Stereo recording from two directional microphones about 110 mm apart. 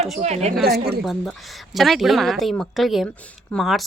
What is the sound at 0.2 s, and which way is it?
Speech, 85° right.